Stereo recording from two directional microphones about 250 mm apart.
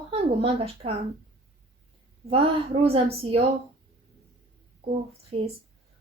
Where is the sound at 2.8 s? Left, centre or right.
Right.